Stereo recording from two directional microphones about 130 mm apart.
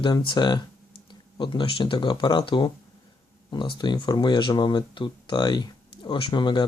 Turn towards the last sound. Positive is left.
turn(degrees=35)  # may be behind; listen again after turning